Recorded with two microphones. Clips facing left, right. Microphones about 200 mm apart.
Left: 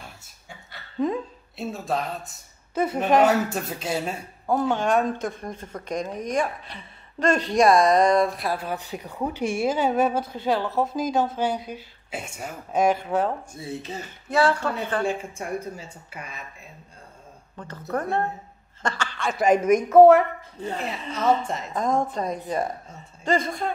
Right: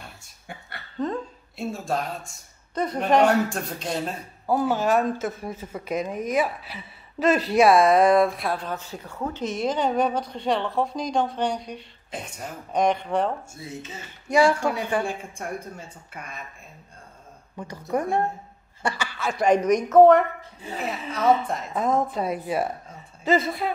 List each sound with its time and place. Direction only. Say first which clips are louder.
0.9 s a woman's voice: left 3 dB; 10° left (ahead or behind)
4.5 s speech: even; 5° right (ahead or behind)
13.6 s speech: left 4 dB; 35° left (ahead or behind)
14.3 s speech: right 2 dB; 15° right (ahead or behind)
15.3 s speech: left 3 dB; 5° left (ahead or behind)
17.6 s speech: right 2 dB; 10° right (ahead or behind); by 20.2 s 5° left (ahead or behind)
20.6 s speech: left 1 dB; 5° right (ahead or behind)